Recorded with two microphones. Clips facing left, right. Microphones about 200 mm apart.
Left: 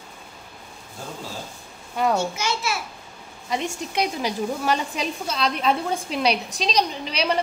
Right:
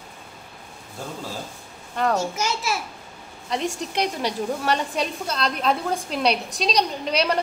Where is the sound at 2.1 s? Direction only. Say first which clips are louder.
Even; 40° right (ahead or behind).